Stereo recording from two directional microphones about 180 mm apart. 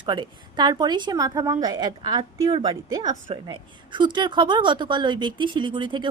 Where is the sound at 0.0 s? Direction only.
25° right (ahead or behind).